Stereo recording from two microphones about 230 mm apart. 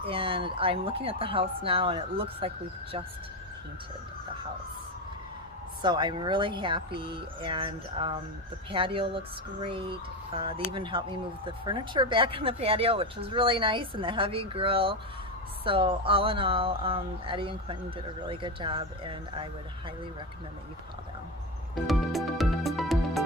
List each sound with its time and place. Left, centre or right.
0.0 s speech: right
5.8 s speech: centre
21.8 s music: centre